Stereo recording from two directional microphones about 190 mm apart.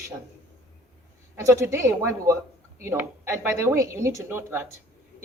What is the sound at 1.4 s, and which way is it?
A woman's voice, 15° right (ahead or behind).